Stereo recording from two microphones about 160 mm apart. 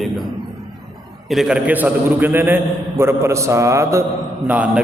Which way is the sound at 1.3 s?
5° right (ahead or behind).